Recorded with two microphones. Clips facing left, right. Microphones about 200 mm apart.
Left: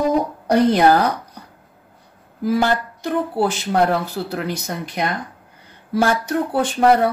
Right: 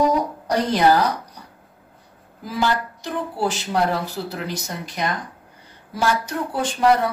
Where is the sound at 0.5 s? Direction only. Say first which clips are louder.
Left 4 dB; 55° left (ahead or behind).